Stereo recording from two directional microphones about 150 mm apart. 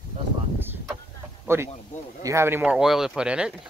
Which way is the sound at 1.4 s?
15° right (ahead or behind).